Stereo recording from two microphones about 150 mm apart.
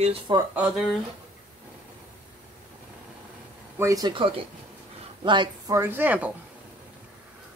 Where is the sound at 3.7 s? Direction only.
20° right (ahead or behind).